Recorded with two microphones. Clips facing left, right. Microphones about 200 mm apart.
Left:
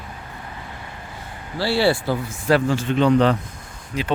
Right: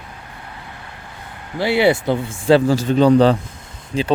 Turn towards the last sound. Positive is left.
turn(degrees=-30)  # may be behind; listen again after turning